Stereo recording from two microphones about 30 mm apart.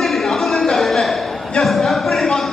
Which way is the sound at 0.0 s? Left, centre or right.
Centre.